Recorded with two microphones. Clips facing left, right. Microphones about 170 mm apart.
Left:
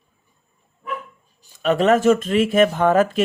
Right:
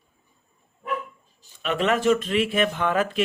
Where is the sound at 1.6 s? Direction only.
40° left (ahead or behind).